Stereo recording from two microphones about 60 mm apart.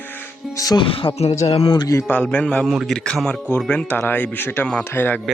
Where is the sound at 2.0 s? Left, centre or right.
Left.